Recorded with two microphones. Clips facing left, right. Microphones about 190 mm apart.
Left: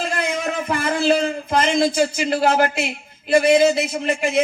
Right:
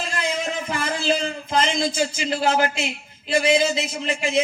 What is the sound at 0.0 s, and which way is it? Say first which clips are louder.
A man's voice: left 3 dB; 55° left (ahead or behind).